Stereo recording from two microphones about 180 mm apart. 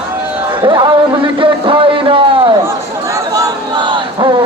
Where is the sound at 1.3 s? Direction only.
30° right (ahead or behind).